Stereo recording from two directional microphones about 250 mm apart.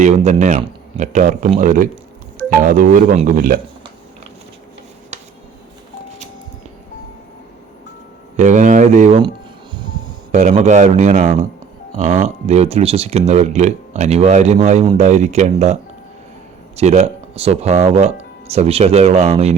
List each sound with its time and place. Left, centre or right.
0.0 s speech: right
8.4 s speech: right
10.3 s speech: right